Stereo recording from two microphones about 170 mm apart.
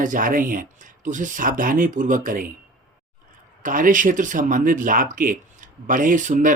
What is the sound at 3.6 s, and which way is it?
Speech, 50° right (ahead or behind).